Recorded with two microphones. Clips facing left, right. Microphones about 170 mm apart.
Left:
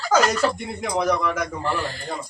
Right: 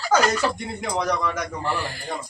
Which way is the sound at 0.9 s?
5° left (ahead or behind).